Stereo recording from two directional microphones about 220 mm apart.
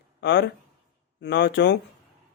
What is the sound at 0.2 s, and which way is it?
Speech, 50° left (ahead or behind).